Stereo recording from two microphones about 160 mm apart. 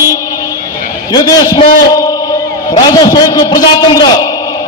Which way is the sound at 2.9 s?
25° left (ahead or behind).